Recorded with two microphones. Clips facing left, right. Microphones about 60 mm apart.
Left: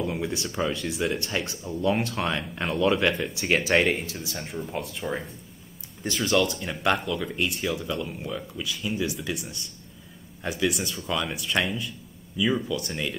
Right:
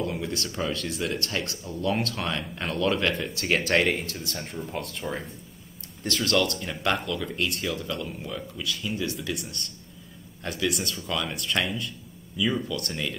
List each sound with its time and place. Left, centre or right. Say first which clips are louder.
0.0 s a sound: left 1 dB; centre
0.7 s speech: left 2 dB; centre
1.7 s speech: left 2 dB; centre